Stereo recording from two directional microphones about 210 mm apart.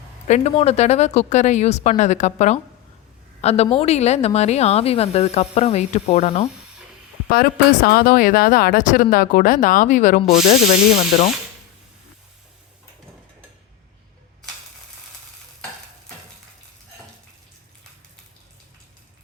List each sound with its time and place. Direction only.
0.3 s a woman's voice: 35° left (ahead or behind)
7.9 s a woman's voice: 45° left (ahead or behind)